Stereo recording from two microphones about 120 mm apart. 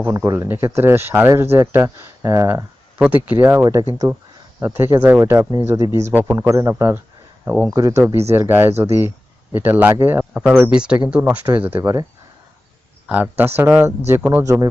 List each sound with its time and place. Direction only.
0.0 s speech: 20° right (ahead or behind)
7.7 s speech: 25° right (ahead or behind)
13.1 s speech: 15° right (ahead or behind)
14.4 s speech: 25° right (ahead or behind)